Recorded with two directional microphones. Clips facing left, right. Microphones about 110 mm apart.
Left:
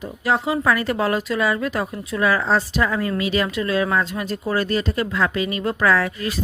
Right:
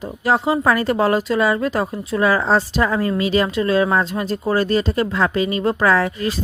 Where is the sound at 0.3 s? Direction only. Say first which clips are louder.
Right 3 dB; 35° right (ahead or behind).